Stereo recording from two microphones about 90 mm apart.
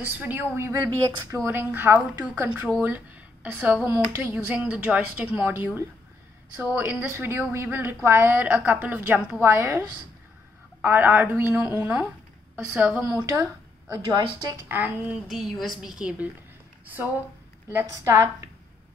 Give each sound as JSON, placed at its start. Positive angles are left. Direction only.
{"t": 0.0, "sound": "a woman's voice", "side_deg": -20}
{"t": 0.7, "sound": "a woman's voice", "side_deg": -50}
{"t": 1.3, "sound": "a woman's voice", "side_deg": -30}
{"t": 6.6, "sound": "a woman's voice", "side_deg": -25}
{"t": 9.5, "sound": "a woman's voice", "side_deg": -30}
{"t": 10.8, "sound": "a woman's voice", "side_deg": -20}
{"t": 13.2, "sound": "a woman's voice", "side_deg": -40}
{"t": 14.0, "sound": "a woman's voice", "side_deg": -55}
{"t": 14.6, "sound": "a woman's voice", "side_deg": -20}
{"t": 15.2, "sound": "a woman's voice", "side_deg": -5}
{"t": 16.8, "sound": "a woman's voice", "side_deg": -20}